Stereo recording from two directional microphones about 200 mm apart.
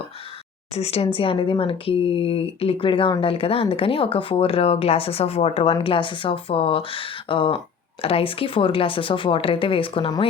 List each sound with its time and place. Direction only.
0.7 s speech: 30° left (ahead or behind)